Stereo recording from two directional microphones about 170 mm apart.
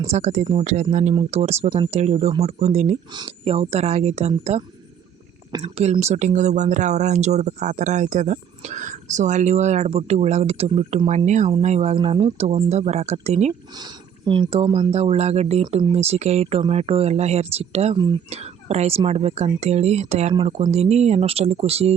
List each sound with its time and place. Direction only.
0.1 s speech: 40° right (ahead or behind)
5.5 s speech: 25° right (ahead or behind)
5.7 s speech: 40° right (ahead or behind)
13.7 s speech: 25° right (ahead or behind)